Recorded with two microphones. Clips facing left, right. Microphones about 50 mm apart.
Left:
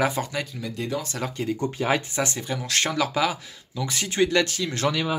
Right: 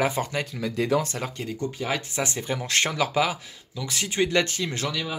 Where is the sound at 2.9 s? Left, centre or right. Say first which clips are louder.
Left 3 dB; centre.